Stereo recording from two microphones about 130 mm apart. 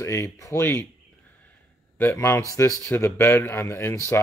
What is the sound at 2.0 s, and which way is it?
Speech, 20° left (ahead or behind).